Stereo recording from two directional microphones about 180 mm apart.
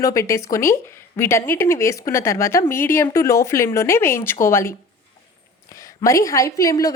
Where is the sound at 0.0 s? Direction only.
15° left (ahead or behind).